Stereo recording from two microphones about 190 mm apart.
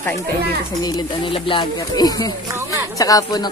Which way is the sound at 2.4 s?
20° right (ahead or behind).